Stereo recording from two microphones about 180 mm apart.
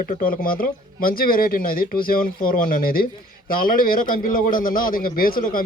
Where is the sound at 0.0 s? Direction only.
50° left (ahead or behind).